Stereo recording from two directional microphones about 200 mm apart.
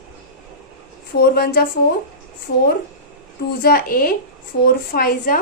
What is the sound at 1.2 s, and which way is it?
A woman's voice, 50° left (ahead or behind).